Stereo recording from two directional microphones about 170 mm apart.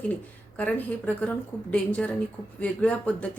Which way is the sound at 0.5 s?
10° left (ahead or behind).